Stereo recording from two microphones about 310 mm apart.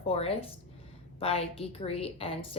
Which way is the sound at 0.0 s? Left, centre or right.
Centre.